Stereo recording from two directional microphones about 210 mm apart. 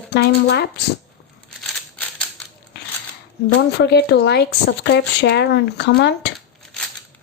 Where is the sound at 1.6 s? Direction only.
5° left (ahead or behind).